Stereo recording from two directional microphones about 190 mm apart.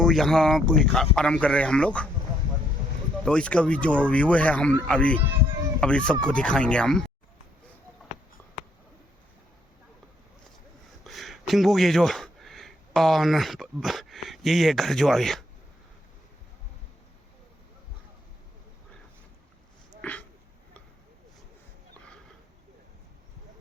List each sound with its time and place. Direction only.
0.0 s speech: centre (ahead or behind)
3.2 s speech: 5° left (ahead or behind)
11.0 s speech: centre (ahead or behind)
20.0 s a sound: 5° left (ahead or behind)